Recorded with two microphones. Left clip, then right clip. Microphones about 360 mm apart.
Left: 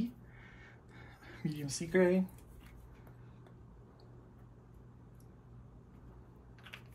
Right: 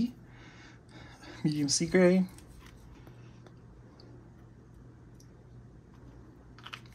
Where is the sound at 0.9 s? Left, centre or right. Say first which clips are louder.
Right 6 dB; centre.